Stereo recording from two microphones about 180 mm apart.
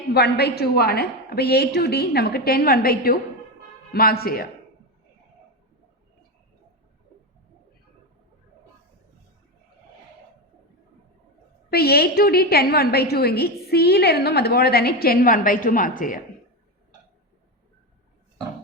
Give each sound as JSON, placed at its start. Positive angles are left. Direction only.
{"t": 0.1, "sound": "a woman's voice", "side_deg": 65}
{"t": 11.7, "sound": "a woman's voice", "side_deg": 60}